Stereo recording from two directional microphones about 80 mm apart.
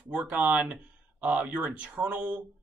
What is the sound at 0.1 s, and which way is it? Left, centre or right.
Speech, centre.